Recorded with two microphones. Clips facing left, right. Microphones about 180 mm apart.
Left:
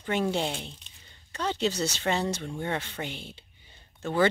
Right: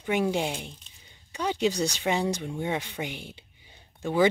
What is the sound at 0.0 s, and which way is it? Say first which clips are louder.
Speech: right 2 dB; 10° right (ahead or behind).